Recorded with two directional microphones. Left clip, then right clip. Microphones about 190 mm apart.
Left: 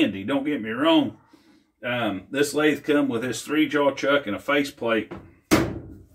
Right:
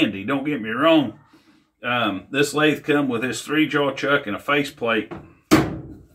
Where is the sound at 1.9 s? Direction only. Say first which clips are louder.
Right 4 dB; centre (ahead or behind).